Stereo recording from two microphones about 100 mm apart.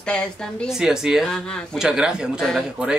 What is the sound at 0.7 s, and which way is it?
Speech, 5° right (ahead or behind).